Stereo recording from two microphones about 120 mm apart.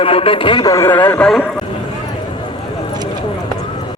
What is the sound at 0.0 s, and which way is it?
Speech, 50° left (ahead or behind).